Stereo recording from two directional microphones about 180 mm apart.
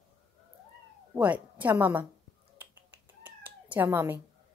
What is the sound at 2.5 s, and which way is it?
Cat, 10° right (ahead or behind).